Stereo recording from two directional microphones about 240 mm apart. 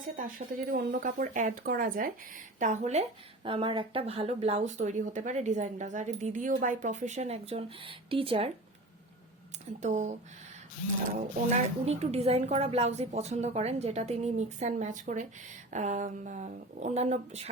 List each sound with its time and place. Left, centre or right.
0.2 s speech: right
9.8 s a woman's voice: right
11.5 s a woman's voice: right